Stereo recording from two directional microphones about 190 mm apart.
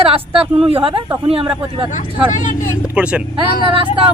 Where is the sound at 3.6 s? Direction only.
25° right (ahead or behind).